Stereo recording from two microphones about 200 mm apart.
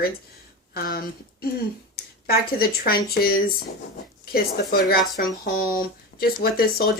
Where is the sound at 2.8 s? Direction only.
50° left (ahead or behind).